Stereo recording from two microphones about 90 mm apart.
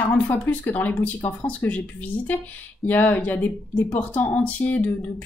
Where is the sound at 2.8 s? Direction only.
20° left (ahead or behind).